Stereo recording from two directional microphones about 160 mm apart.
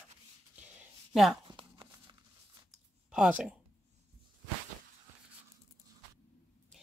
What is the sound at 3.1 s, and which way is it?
Speech, 5° right (ahead or behind).